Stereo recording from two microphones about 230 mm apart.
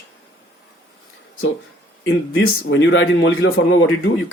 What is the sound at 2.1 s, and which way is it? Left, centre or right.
A man's voice, left.